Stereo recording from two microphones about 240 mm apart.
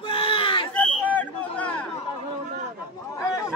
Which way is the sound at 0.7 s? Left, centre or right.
Centre.